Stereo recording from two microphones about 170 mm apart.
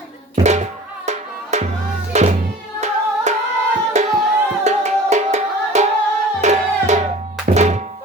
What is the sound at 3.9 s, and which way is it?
Singing, 40° right (ahead or behind).